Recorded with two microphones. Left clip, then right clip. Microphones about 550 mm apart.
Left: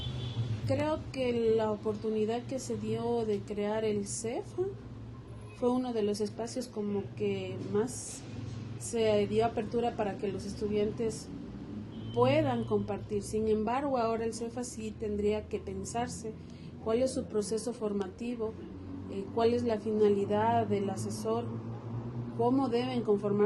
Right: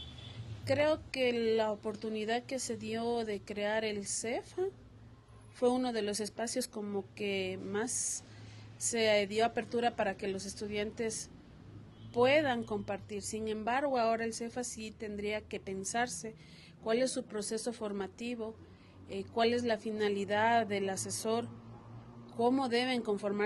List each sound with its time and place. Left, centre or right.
0.7 s a woman's voice: right
19.4 s a woman's voice: right
22.4 s a woman's voice: right